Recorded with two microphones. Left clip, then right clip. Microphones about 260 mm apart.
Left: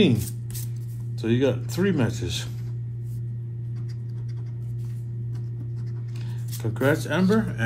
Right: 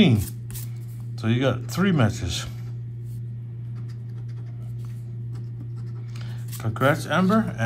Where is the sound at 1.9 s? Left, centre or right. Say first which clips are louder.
Right 3 dB; right.